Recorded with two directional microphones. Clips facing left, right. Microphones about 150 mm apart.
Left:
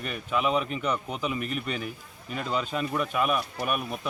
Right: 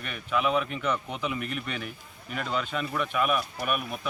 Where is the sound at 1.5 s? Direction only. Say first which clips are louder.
Left 2 dB; 35° left (ahead or behind).